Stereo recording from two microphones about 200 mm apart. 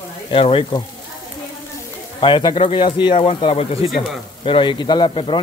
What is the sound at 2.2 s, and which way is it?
Speech, 25° left (ahead or behind).